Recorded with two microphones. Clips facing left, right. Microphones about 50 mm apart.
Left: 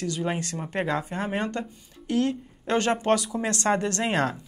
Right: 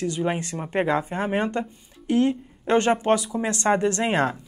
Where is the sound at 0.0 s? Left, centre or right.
Centre.